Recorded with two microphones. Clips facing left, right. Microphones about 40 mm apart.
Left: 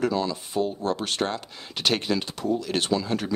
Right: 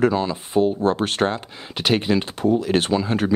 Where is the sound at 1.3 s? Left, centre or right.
Centre.